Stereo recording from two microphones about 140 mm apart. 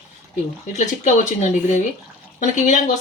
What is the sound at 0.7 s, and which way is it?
Speech, 55° left (ahead or behind).